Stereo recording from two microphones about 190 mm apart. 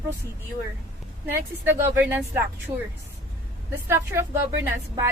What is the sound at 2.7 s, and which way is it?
Speech, 25° right (ahead or behind).